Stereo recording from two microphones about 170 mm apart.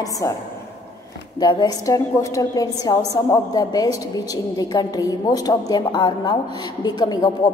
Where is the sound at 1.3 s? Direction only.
25° left (ahead or behind).